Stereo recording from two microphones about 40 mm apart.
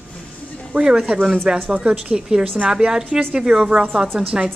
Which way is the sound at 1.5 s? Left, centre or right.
Right.